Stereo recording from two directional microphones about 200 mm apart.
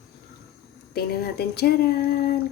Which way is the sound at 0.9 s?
55° left (ahead or behind).